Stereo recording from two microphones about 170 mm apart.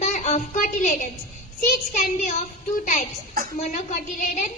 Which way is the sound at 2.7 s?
45° left (ahead or behind).